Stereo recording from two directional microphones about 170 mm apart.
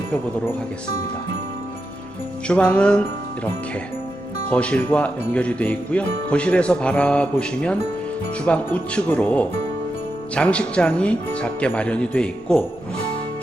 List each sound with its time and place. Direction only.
2.5 s jingle bell: 10° left (ahead or behind)
4.4 s jingle bell: 5° left (ahead or behind)